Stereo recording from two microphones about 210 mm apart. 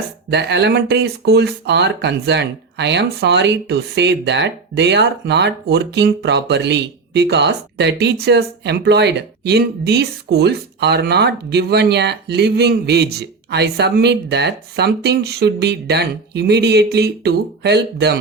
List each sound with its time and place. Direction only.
0.3 s speech: 55° right (ahead or behind)